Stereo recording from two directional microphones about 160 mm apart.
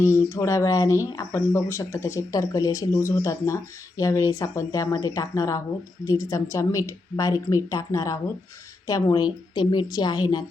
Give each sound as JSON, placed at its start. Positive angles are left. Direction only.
{"t": 0.0, "sound": "speech", "side_deg": 15}